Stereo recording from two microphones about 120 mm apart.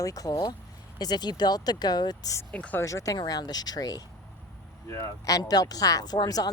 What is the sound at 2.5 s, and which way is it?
Speech, 10° left (ahead or behind).